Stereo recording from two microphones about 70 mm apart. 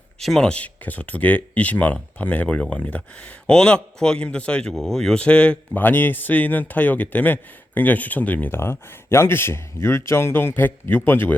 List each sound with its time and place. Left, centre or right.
0.2 s speech: centre
0.5 s a man's voice: left
4.7 s speech: centre
5.2 s speech: centre
5.8 s a man's voice: left